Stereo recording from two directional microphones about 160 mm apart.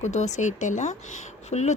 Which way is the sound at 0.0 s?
45° left (ahead or behind).